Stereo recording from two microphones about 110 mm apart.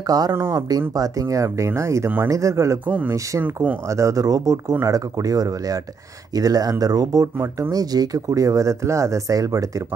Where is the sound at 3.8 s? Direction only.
30° right (ahead or behind).